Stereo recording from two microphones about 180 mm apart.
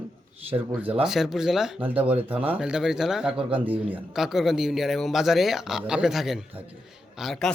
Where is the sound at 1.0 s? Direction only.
Centre (ahead or behind).